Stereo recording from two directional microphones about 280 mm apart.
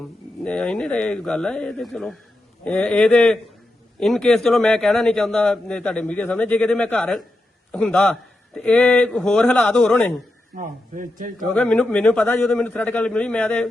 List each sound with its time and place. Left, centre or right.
0.4 s a man's voice: centre
10.6 s a man's voice: right
11.5 s a man's voice: centre